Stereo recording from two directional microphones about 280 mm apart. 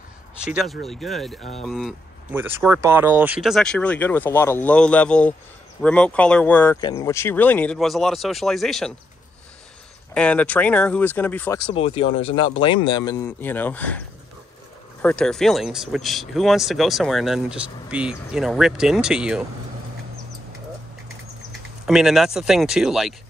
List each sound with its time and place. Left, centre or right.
0.8 s speech: centre
10.1 s speech: centre
11.7 s speech: centre
21.5 s speech: centre